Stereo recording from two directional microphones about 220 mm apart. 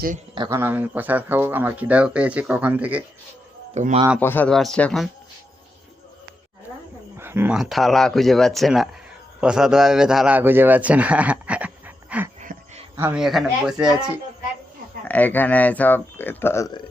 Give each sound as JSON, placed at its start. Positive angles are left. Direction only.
{"t": 0.3, "sound": "speech", "side_deg": -15}
{"t": 3.8, "sound": "a man's voice", "side_deg": -30}
{"t": 4.2, "sound": "speech", "side_deg": 10}
{"t": 7.2, "sound": "a man's voice", "side_deg": -10}
{"t": 12.4, "sound": "a sound", "side_deg": -35}
{"t": 13.0, "sound": "speech", "side_deg": -5}
{"t": 15.0, "sound": "speech", "side_deg": 5}